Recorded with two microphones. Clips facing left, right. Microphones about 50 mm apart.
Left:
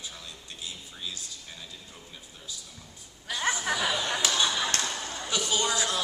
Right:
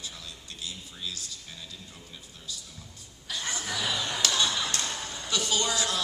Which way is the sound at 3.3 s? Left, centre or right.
Left.